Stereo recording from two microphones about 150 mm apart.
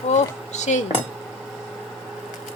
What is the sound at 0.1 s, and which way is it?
Speech, 50° left (ahead or behind).